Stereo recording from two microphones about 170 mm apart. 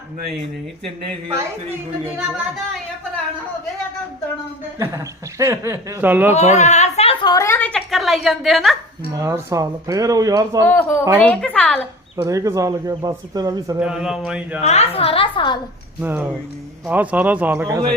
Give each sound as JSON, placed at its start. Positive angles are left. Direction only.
{"t": 4.8, "sound": "a man's voice", "side_deg": -15}
{"t": 6.3, "sound": "a sound", "side_deg": 40}
{"t": 9.1, "sound": "speech", "side_deg": -15}
{"t": 10.6, "sound": "a woman's voice", "side_deg": 15}
{"t": 12.1, "sound": "speech", "side_deg": -20}
{"t": 13.7, "sound": "a man's voice", "side_deg": -5}
{"t": 14.6, "sound": "a woman's voice", "side_deg": 40}
{"t": 16.0, "sound": "a man's voice", "side_deg": -10}